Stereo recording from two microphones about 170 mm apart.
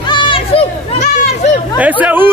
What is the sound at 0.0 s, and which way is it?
Chatter, 30° left (ahead or behind).